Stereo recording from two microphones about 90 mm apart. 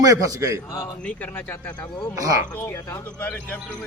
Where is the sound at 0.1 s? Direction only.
35° right (ahead or behind).